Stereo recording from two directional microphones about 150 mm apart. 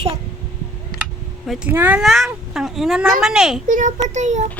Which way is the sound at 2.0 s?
Centre (ahead or behind).